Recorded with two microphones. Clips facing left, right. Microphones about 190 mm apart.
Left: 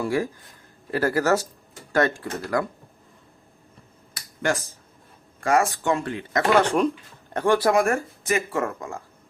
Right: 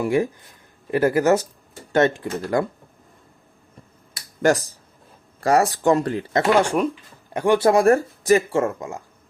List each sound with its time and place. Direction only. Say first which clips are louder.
0.0 s speech: right 4 dB; 20° right (ahead or behind)
5.4 s speech: right 3 dB; 35° right (ahead or behind)
6.5 s speech: even; 10° right (ahead or behind)
7.6 s speech: right 5 dB; 30° right (ahead or behind)